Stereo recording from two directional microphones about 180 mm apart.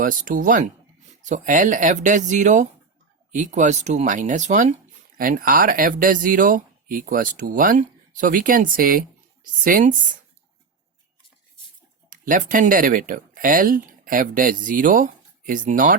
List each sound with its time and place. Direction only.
0.0 s speech: 45° right (ahead or behind)
12.1 s speech: 45° right (ahead or behind)